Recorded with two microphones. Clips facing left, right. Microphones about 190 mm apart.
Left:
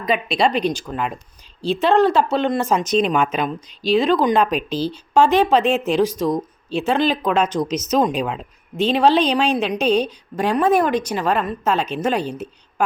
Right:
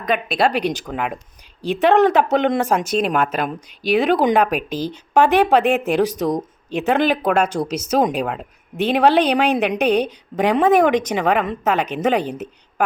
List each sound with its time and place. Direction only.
0.0 s a woman's voice: centre (ahead or behind); by 12.5 s 15° right (ahead or behind)